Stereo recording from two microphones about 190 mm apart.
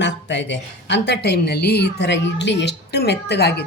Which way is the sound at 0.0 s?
70° left (ahead or behind).